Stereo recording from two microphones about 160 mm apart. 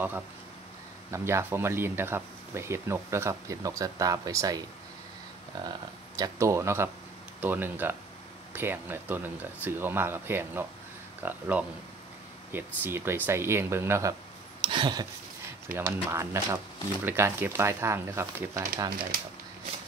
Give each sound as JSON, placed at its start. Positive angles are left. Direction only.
{"t": 1.1, "sound": "speech", "side_deg": -15}
{"t": 5.6, "sound": "speech", "side_deg": -25}
{"t": 14.6, "sound": "a sound", "side_deg": -30}
{"t": 15.7, "sound": "speech", "side_deg": -15}